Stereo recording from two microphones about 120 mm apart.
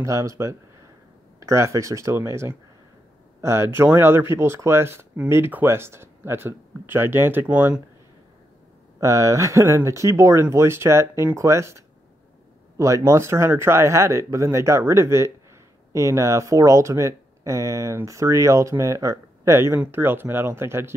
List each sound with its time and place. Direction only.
0.0 s speech: 25° right (ahead or behind)
9.0 s speech: 25° right (ahead or behind)